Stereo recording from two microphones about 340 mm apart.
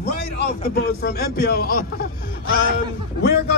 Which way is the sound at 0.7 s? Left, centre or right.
Left.